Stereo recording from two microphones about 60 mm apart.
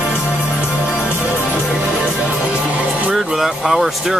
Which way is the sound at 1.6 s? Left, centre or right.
Centre.